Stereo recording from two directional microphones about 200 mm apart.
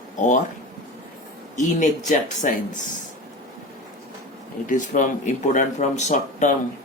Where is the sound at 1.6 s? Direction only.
40° left (ahead or behind).